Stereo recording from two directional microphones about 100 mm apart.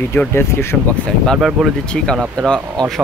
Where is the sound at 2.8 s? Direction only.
5° left (ahead or behind).